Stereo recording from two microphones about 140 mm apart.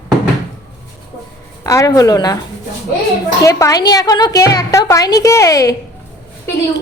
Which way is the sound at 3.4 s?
25° left (ahead or behind).